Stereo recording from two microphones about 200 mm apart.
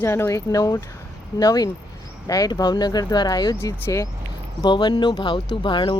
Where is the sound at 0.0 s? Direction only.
10° left (ahead or behind).